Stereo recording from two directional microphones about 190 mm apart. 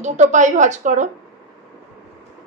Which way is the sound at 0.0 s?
40° right (ahead or behind).